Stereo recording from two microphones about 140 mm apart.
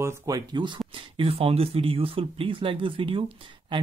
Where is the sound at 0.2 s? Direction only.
30° right (ahead or behind).